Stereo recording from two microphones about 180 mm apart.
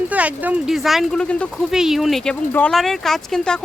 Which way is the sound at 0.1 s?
10° right (ahead or behind).